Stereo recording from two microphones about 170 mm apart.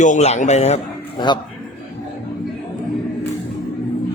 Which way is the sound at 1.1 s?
25° left (ahead or behind).